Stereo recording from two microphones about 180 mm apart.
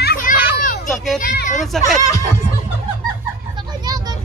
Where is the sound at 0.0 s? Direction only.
55° left (ahead or behind).